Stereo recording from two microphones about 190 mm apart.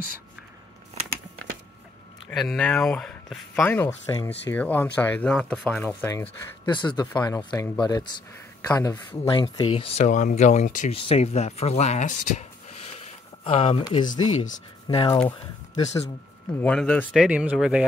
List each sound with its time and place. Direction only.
2.2 s speech: 5° left (ahead or behind); by 14.2 s 20° left (ahead or behind)
14.4 s speech: 40° left (ahead or behind)
15.0 s speech: 25° left (ahead or behind)
16.6 s speech: 5° left (ahead or behind)